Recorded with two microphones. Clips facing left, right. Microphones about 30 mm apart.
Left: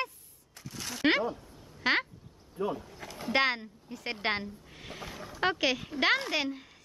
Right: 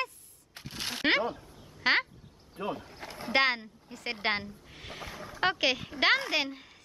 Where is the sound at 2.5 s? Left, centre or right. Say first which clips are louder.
Left 2 dB; right.